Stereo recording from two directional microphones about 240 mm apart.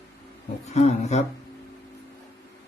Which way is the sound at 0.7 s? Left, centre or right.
Left.